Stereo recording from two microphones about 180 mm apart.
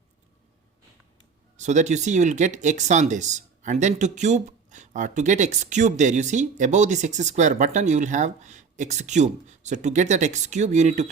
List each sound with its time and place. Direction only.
1.5 s speech: 40° right (ahead or behind)